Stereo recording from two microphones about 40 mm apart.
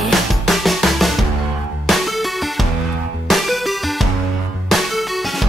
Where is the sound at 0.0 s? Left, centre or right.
Centre.